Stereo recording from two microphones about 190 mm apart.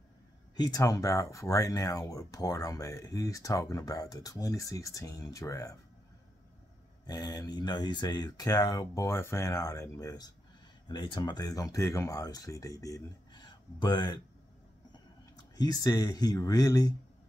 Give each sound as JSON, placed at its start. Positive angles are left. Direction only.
{"t": 0.6, "sound": "speech", "side_deg": 20}
{"t": 7.1, "sound": "speech", "side_deg": 20}
{"t": 15.5, "sound": "speech", "side_deg": 20}